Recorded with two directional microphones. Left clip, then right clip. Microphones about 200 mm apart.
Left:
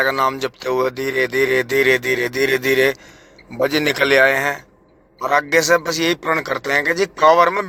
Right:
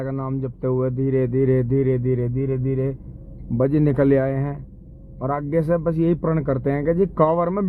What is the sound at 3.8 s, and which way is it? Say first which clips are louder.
Speech: left 7 dB; centre (ahead or behind).